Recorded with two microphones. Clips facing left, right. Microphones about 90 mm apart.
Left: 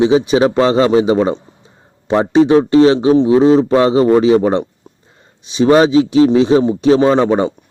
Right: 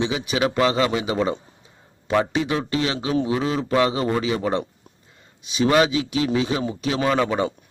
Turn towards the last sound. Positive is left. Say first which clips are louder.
# left 9 dB
turn(degrees=30)  # may be behind; listen again after turning